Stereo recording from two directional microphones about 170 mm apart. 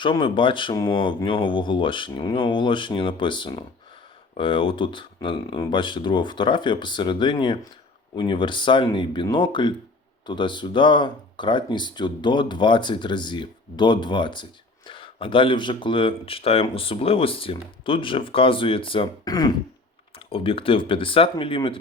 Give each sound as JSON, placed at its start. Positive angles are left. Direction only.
{"t": 0.0, "sound": "speech", "side_deg": 30}